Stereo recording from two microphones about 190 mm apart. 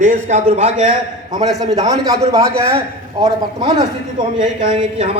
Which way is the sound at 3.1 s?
20° right (ahead or behind).